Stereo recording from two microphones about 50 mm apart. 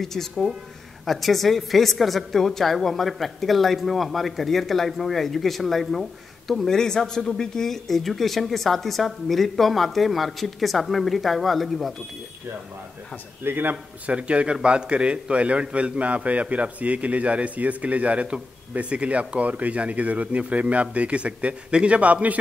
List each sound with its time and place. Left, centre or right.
0.0 s a woman's voice: centre
13.4 s a man's voice: right
14.0 s a man's voice: right